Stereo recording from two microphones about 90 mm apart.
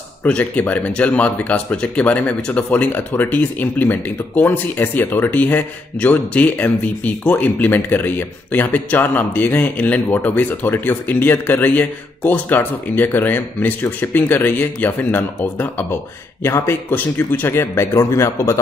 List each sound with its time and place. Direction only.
0.2 s speech: 15° left (ahead or behind); by 18.6 s 35° left (ahead or behind)